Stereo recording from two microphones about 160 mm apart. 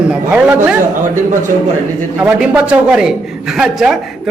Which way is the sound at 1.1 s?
50° right (ahead or behind).